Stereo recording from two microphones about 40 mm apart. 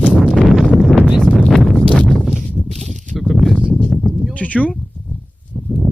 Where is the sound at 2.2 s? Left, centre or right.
Centre.